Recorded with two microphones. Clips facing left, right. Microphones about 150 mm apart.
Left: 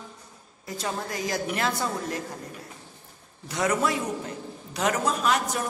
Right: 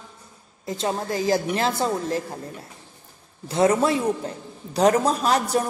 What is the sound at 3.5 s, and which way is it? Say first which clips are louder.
A man's voice: right 6 dB; 30° right (ahead or behind).